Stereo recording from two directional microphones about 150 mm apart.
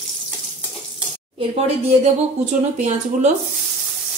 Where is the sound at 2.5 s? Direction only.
55° right (ahead or behind).